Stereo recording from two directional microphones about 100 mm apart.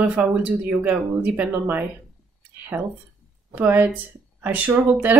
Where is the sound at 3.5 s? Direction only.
20° right (ahead or behind).